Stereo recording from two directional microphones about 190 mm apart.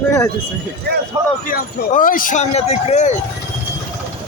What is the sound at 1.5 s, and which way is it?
Speech, 45° left (ahead or behind).